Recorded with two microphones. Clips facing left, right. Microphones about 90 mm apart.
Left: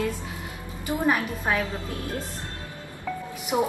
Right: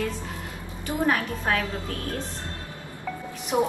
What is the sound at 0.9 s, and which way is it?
Speech, 10° left (ahead or behind).